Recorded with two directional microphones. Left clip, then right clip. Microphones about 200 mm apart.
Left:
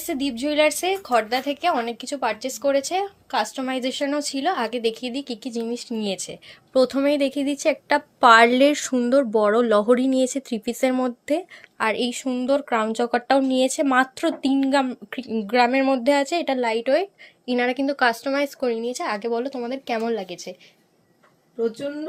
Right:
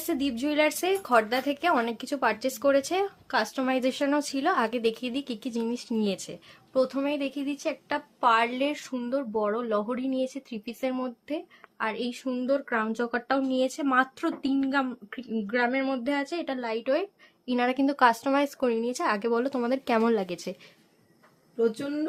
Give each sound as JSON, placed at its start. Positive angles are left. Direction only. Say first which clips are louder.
{"t": 0.1, "sound": "a woman's voice", "louder": "left 4 dB", "side_deg": -15}
{"t": 6.7, "sound": "a woman's voice", "louder": "left 8 dB", "side_deg": 20}